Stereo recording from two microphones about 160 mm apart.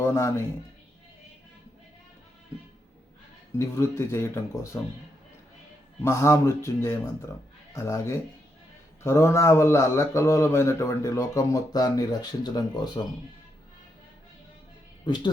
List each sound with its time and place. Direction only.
0.0 s speech: 15° left (ahead or behind)
3.6 s speech: 15° left (ahead or behind)
6.0 s speech: 15° left (ahead or behind)
15.0 s speech: 30° left (ahead or behind)